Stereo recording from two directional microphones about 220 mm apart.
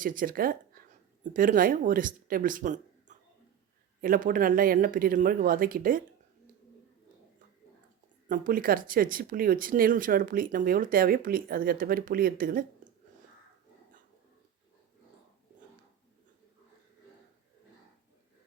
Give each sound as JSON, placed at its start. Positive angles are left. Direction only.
{"t": 0.0, "sound": "speech", "side_deg": -40}
{"t": 8.3, "sound": "speech", "side_deg": -40}